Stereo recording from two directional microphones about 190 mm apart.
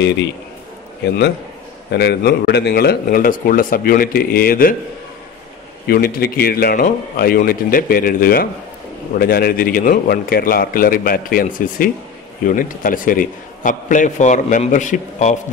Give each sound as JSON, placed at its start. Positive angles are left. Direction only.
{"t": 1.9, "sound": "speech", "side_deg": 60}
{"t": 5.9, "sound": "speech", "side_deg": 50}